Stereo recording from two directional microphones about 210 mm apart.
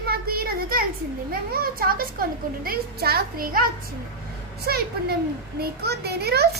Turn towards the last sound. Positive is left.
turn(degrees=-50)  # may be behind; listen again after turning